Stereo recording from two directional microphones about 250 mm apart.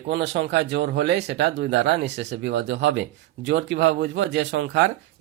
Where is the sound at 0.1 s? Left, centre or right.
Right.